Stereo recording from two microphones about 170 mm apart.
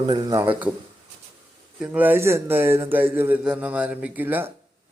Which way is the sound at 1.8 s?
10° right (ahead or behind).